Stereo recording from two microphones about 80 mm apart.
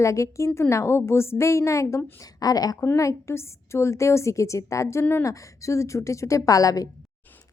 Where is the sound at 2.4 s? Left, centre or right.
Left.